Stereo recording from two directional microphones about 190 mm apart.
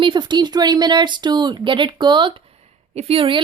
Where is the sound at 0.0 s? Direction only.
25° right (ahead or behind).